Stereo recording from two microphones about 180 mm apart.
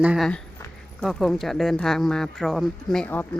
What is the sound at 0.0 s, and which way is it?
Speech, 5° right (ahead or behind).